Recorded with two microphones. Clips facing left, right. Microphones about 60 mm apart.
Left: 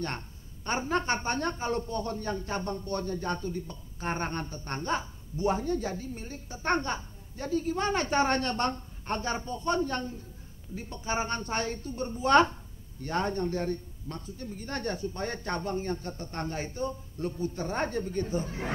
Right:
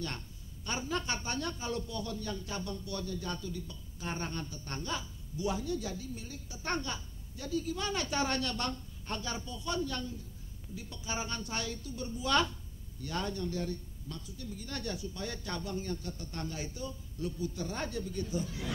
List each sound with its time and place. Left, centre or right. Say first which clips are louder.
0.7 s a man's voice: left 7 dB; left